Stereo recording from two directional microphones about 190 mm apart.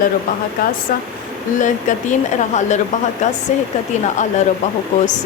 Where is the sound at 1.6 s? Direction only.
40° left (ahead or behind).